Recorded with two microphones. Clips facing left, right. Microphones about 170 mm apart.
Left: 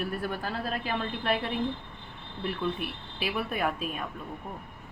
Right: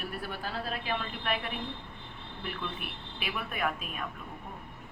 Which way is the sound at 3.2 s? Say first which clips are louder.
Left 5 dB; 35° left (ahead or behind).